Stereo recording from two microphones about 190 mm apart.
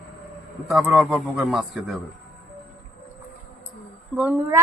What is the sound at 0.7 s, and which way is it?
A man's voice, 5° right (ahead or behind).